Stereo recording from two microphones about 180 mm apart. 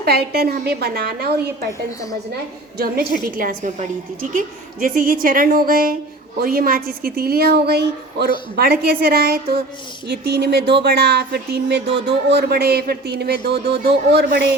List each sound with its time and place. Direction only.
0.0 s speech: 60° right (ahead or behind)
3.3 s a woman's voice: 45° right (ahead or behind); by 14.5 s 65° right (ahead or behind)